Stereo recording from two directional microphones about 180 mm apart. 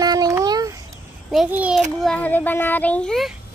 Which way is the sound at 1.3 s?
5° right (ahead or behind).